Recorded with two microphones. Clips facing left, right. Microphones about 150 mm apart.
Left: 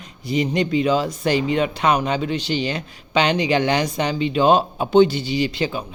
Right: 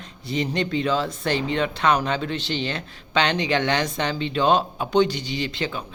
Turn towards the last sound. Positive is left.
turn(degrees=20)  # may be behind; listen again after turning